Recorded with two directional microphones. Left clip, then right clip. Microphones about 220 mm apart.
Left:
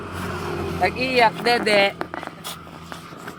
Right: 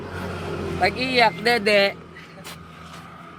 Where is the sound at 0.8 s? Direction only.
15° right (ahead or behind).